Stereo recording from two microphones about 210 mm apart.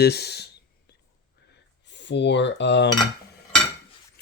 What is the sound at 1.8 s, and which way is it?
Cutlery, 55° left (ahead or behind).